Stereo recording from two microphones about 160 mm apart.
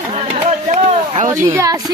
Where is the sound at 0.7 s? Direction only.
45° right (ahead or behind).